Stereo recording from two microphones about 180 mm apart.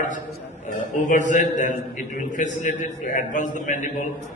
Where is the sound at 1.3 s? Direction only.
45° left (ahead or behind).